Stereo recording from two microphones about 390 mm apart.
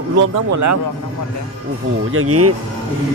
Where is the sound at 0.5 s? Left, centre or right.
Right.